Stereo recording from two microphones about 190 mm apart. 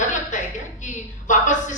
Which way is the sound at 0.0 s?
40° left (ahead or behind).